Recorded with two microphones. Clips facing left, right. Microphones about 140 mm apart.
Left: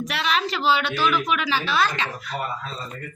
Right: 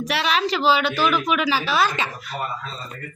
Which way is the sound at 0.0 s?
Centre (ahead or behind).